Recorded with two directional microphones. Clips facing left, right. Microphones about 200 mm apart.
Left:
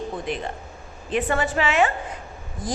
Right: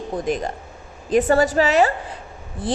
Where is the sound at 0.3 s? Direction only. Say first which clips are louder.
Right 5 dB; 45° right (ahead or behind).